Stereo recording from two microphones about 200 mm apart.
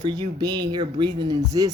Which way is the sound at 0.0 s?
20° right (ahead or behind).